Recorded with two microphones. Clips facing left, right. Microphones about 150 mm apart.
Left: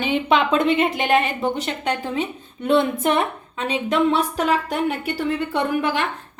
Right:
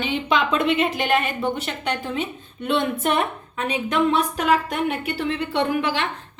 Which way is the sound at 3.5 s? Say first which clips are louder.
Left 3 dB; 30° left (ahead or behind).